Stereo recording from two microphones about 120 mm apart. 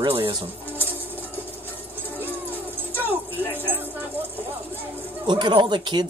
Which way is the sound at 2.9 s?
15° right (ahead or behind).